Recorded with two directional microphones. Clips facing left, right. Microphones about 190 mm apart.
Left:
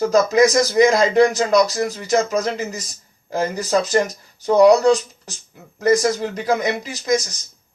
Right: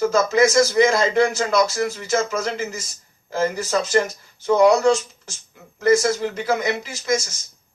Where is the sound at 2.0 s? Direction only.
15° left (ahead or behind).